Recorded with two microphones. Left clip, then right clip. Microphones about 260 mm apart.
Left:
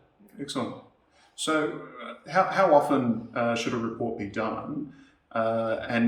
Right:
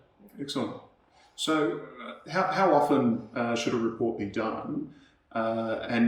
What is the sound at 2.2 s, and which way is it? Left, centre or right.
A man's voice, centre.